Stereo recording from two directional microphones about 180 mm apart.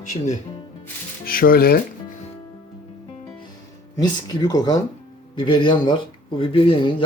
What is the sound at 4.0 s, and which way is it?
Speech, 20° left (ahead or behind).